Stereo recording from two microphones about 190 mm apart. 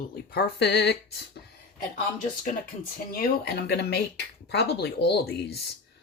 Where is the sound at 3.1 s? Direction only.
55° left (ahead or behind).